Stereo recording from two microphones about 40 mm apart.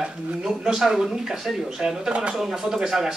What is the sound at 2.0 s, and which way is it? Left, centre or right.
Speech, right.